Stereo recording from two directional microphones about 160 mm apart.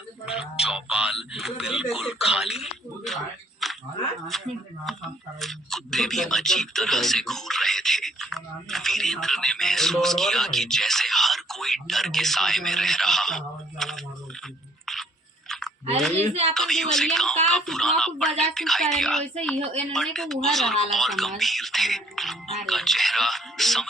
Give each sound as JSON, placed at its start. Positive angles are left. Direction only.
{"t": 0.6, "sound": "speech", "side_deg": -5}
{"t": 3.6, "sound": "a sound", "side_deg": 0}
{"t": 4.3, "sound": "speech", "side_deg": 0}
{"t": 16.1, "sound": "a woman's voice", "side_deg": -40}
{"t": 16.6, "sound": "speech", "side_deg": 5}